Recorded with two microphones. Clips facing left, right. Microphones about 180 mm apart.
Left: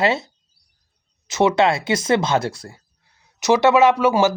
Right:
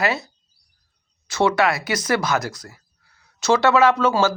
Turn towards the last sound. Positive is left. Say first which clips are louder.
# left 2 dB
turn(degrees=15)  # may be behind; listen again after turning